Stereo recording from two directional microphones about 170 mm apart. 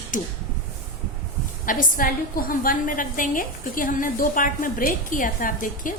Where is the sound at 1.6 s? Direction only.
55° left (ahead or behind).